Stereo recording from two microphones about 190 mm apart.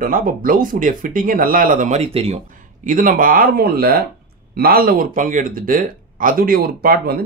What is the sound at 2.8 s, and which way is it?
Speech, 45° right (ahead or behind).